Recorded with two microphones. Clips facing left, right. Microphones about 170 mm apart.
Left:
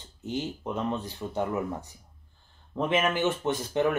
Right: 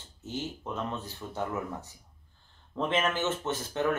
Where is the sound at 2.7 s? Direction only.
10° left (ahead or behind).